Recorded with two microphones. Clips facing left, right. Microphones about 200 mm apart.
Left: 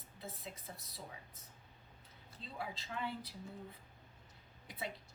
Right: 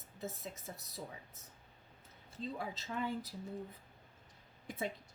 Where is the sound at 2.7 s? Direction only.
45° right (ahead or behind).